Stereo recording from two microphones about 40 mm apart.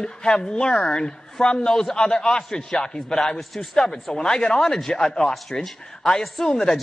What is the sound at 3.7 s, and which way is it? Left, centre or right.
A woman's voice, centre.